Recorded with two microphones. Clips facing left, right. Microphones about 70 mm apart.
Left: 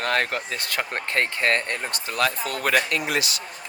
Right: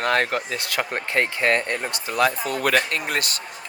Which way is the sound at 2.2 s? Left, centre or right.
Right.